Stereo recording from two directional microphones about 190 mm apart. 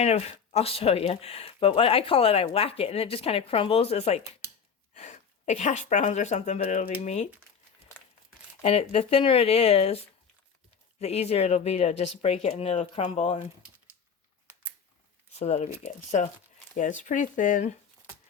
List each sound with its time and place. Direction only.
0.0 s speech: 35° left (ahead or behind)
8.6 s speech: 30° left (ahead or behind)
11.0 s speech: 35° left (ahead or behind)
15.4 s speech: 35° left (ahead or behind)